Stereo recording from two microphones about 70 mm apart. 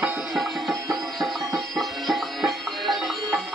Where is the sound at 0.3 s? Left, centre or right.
Centre.